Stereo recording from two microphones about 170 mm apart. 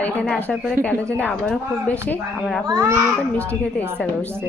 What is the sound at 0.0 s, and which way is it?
Speech, 5° left (ahead or behind).